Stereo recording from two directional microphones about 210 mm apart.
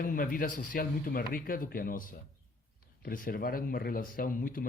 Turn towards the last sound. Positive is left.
turn(degrees=40)  # may be behind; listen again after turning